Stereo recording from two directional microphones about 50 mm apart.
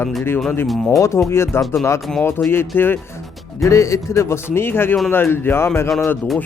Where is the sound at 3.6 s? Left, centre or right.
Left.